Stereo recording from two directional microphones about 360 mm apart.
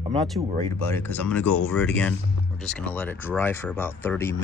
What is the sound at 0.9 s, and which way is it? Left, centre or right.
Speech, centre.